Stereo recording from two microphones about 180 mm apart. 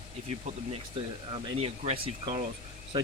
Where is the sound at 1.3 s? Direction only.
30° right (ahead or behind).